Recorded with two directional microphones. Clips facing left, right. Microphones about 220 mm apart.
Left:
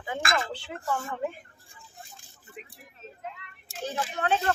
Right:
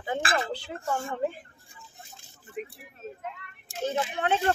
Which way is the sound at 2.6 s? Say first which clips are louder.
Right 10 dB; 45° right (ahead or behind).